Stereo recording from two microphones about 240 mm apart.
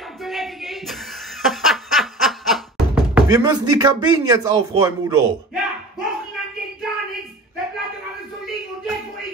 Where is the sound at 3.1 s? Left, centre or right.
Centre.